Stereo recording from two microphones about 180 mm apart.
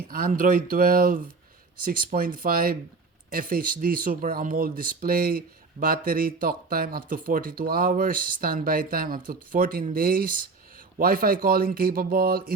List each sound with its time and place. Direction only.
0.1 s speech: 50° right (ahead or behind)